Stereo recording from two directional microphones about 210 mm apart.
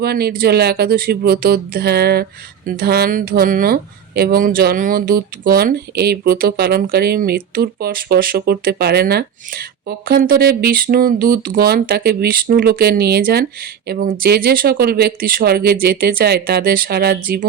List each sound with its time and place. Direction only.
0.0 s speech: 50° right (ahead or behind)